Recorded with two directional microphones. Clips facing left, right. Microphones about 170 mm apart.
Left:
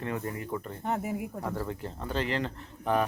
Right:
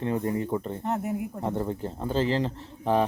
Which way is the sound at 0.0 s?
30° right (ahead or behind).